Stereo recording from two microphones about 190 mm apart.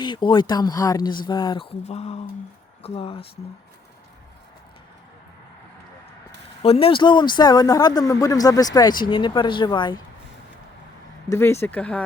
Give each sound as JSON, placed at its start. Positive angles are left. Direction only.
{"t": 0.0, "sound": "speech", "side_deg": 25}
{"t": 1.8, "sound": "speech", "side_deg": 35}
{"t": 6.6, "sound": "speech", "side_deg": 30}
{"t": 11.3, "sound": "speech", "side_deg": 15}